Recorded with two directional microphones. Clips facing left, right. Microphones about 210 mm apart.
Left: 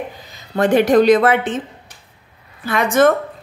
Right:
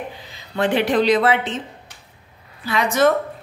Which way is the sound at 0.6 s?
45° left (ahead or behind).